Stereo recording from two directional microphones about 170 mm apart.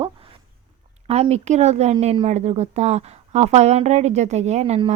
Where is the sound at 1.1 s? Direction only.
40° right (ahead or behind).